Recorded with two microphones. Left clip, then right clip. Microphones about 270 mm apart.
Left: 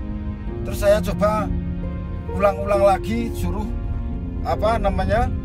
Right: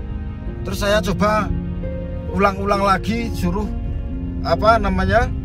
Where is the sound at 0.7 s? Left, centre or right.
Right.